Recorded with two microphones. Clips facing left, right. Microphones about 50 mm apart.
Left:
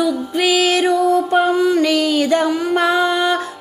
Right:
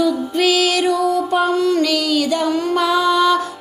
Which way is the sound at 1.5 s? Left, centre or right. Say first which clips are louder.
Left 1 dB; centre.